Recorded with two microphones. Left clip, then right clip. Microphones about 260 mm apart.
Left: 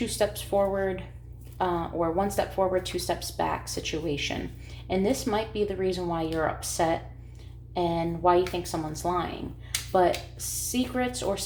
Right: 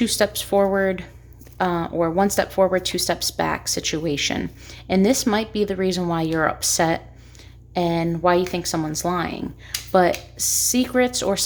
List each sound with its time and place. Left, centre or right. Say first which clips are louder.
0.0 s speech: right 7 dB; right